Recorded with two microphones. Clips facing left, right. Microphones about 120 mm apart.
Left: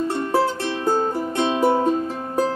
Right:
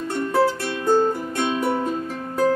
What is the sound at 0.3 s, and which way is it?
Music, 25° left (ahead or behind).